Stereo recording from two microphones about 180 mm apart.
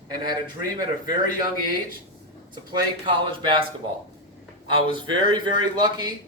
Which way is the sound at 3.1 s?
25° right (ahead or behind).